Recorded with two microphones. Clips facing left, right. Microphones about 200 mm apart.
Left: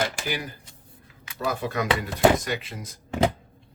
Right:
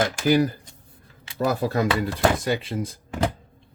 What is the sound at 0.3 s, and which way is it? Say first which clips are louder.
Speech: right 12 dB; 40° right (ahead or behind).